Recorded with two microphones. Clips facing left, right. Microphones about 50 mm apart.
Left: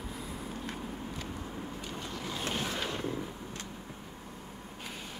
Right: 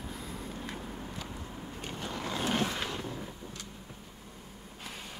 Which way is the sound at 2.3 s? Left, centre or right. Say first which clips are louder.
Right 5 dB; right.